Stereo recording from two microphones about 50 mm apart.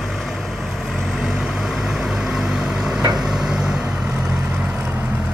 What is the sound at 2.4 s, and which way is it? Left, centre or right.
Vehicle, centre.